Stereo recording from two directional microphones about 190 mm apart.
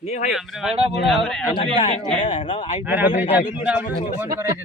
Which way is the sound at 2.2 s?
40° left (ahead or behind).